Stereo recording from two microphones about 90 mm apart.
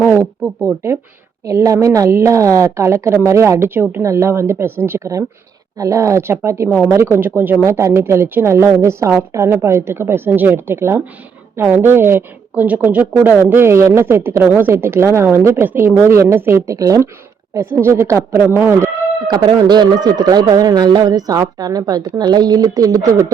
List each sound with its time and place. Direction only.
0.2 s a woman's voice: 30° right (ahead or behind)
5.7 s a woman's voice: 35° right (ahead or behind)
19.3 s speech: 55° right (ahead or behind)